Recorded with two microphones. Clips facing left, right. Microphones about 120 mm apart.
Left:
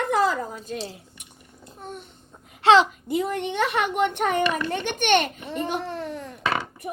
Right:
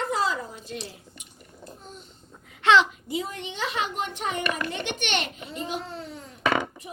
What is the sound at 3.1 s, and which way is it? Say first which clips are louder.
A child's voice: left 7 dB; 55° left (ahead or behind).